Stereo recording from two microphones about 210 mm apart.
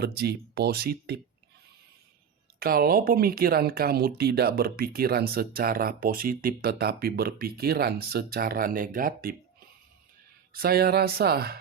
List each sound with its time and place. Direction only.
0.0 s speech: 50° right (ahead or behind)
2.6 s speech: 45° right (ahead or behind)
10.5 s speech: 45° right (ahead or behind)